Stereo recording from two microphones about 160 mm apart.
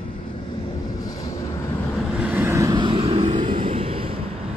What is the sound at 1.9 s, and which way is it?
Vehicle, 5° right (ahead or behind).